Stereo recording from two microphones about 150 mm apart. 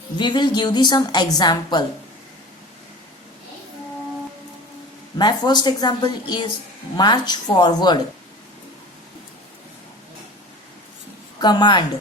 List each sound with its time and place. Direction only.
0.2 s a woman's voice: 30° left (ahead or behind)
5.1 s a woman's voice: 30° left (ahead or behind)
11.3 s a woman's voice: 30° left (ahead or behind)